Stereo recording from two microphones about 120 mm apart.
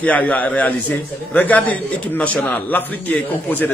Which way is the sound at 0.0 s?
15° left (ahead or behind).